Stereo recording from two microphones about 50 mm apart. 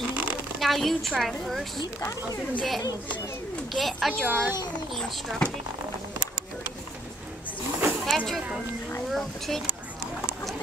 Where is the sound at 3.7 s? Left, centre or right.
Centre.